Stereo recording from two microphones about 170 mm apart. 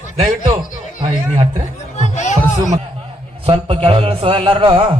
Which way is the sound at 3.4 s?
30° right (ahead or behind).